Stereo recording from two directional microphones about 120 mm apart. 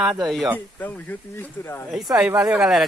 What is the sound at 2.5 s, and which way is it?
Speech, 5° right (ahead or behind).